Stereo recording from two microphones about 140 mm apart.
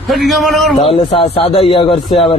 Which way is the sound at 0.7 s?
40° left (ahead or behind).